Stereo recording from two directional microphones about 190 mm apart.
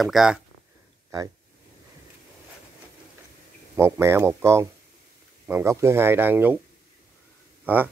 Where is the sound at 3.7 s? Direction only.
15° right (ahead or behind).